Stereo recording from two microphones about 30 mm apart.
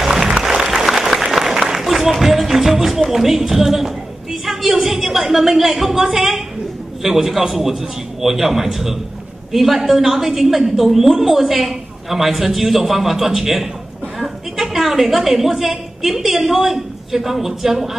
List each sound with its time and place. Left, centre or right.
0.0 s music: centre
3.1 s a woman's voice: centre